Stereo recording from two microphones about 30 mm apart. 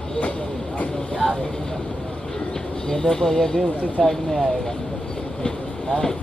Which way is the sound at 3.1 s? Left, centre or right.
Centre.